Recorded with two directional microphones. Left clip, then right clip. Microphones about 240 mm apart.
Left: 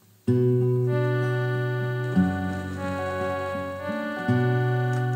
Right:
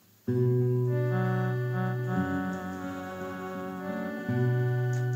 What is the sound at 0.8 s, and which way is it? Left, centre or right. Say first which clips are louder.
Music: left 5 dB; left.